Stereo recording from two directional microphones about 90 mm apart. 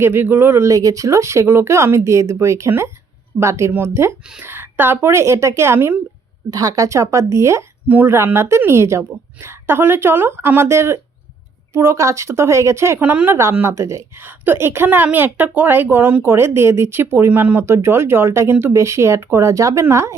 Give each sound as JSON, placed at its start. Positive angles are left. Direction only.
{"t": 0.0, "sound": "a woman's voice", "side_deg": -25}
{"t": 0.7, "sound": "a woman's voice", "side_deg": -40}
{"t": 6.5, "sound": "speech", "side_deg": -45}
{"t": 7.9, "sound": "a woman's voice", "side_deg": -25}
{"t": 13.0, "sound": "a woman's voice", "side_deg": -15}
{"t": 13.3, "sound": "a woman's voice", "side_deg": -25}